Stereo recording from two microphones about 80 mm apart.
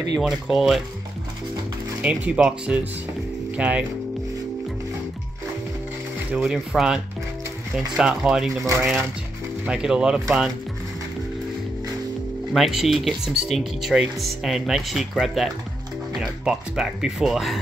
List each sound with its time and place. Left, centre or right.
0.2 s speech: centre
2.0 s speech: centre
6.3 s speech: centre
9.7 s speech: centre
12.5 s speech: centre